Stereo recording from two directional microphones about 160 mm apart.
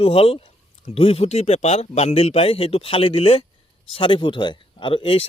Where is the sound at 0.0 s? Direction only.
35° left (ahead or behind).